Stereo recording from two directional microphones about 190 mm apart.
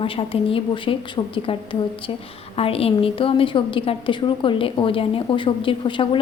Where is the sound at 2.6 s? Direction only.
30° left (ahead or behind).